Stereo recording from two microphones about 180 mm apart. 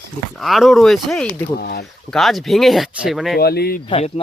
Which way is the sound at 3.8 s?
30° left (ahead or behind).